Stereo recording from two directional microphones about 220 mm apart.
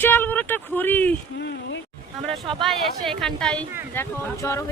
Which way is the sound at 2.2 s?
30° right (ahead or behind).